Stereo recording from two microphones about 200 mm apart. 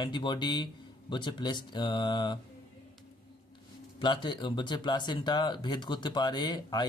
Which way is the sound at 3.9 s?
25° left (ahead or behind).